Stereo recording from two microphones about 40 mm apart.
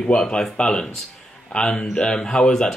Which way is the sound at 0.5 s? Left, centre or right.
Left.